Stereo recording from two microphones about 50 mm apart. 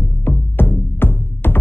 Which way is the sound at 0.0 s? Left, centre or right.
Left.